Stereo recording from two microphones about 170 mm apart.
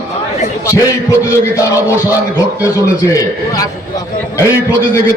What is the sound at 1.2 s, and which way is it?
Speech, 20° left (ahead or behind).